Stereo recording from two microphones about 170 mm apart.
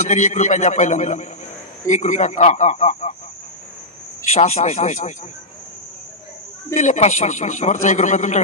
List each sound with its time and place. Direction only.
0.0 s a man's voice: 45° left (ahead or behind)
4.2 s a man's voice: 40° left (ahead or behind)
6.7 s a man's voice: 45° left (ahead or behind)